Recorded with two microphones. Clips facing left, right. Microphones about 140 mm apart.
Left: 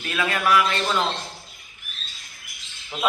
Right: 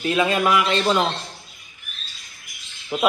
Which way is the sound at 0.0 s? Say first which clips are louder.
Right 5 dB; 20° right (ahead or behind).